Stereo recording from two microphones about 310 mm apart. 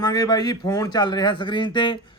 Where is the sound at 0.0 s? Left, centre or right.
Centre.